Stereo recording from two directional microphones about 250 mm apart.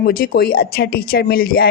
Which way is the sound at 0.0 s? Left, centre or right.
Left.